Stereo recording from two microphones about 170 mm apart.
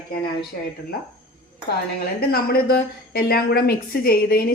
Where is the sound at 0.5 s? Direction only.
60° left (ahead or behind).